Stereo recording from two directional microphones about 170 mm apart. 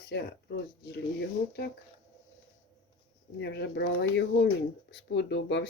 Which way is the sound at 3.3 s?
85° left.